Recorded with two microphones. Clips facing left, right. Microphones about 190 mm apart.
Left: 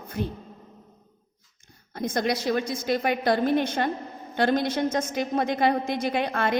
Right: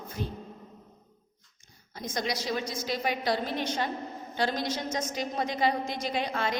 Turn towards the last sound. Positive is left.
turn(degrees=55)  # may be behind; listen again after turning